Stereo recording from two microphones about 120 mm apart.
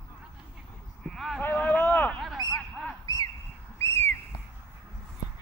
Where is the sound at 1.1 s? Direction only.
Centre (ahead or behind).